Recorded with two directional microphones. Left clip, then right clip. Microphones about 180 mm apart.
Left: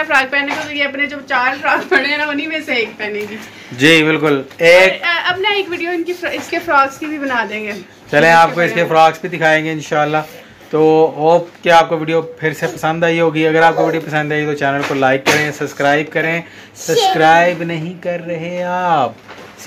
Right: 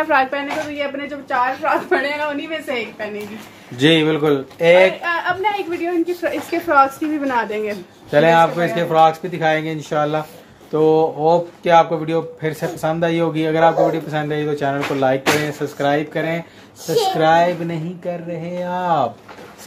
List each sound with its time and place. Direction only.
0.0 s speech: 50° right (ahead or behind)
3.7 s speech: centre (ahead or behind)
5.0 s speech: 50° right (ahead or behind)
6.2 s a woman's voice: 70° right (ahead or behind)
8.1 s speech: centre (ahead or behind)